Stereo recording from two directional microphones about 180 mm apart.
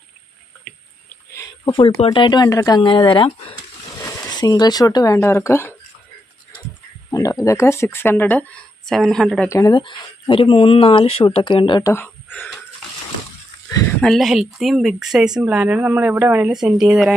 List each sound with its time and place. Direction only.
1.3 s a sound: 20° left (ahead or behind)
2.0 s speech: 25° left (ahead or behind)
7.1 s speech: 20° left (ahead or behind); by 9.5 s centre (ahead or behind)
9.5 s speech: 20° left (ahead or behind)
14.0 s speech: centre (ahead or behind)